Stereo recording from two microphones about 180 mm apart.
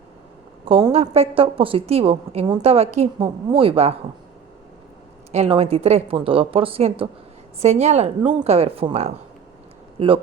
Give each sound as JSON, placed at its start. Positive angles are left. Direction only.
{"t": 0.6, "sound": "a woman's voice", "side_deg": -30}
{"t": 5.3, "sound": "a woman's voice", "side_deg": -35}